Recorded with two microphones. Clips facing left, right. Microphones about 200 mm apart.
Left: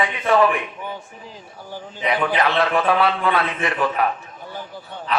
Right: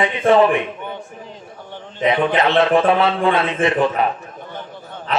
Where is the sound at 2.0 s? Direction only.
25° right (ahead or behind).